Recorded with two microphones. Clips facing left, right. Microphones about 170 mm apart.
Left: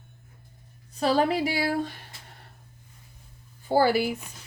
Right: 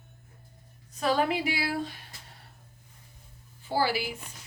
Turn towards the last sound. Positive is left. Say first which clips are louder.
# left 6 dB
turn(degrees=50)  # may be behind; listen again after turning